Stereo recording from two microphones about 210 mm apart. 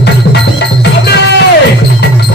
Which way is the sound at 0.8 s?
55° left (ahead or behind).